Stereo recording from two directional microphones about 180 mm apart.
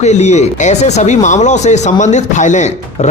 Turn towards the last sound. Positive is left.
turn(degrees=40)  # may be behind; listen again after turning